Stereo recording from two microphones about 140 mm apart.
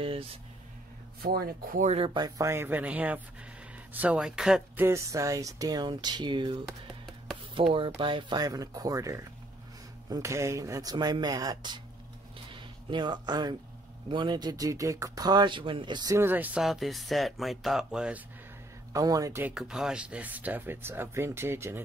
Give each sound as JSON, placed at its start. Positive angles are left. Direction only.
{"t": 0.0, "sound": "speech", "side_deg": -40}
{"t": 1.2, "sound": "speech", "side_deg": -90}
{"t": 1.9, "sound": "speech", "side_deg": -40}
{"t": 4.7, "sound": "speech", "side_deg": -20}
{"t": 7.7, "sound": "speech", "side_deg": -35}
{"t": 16.2, "sound": "speech", "side_deg": -15}
{"t": 18.9, "sound": "speech", "side_deg": -25}
{"t": 19.4, "sound": "speech", "side_deg": -5}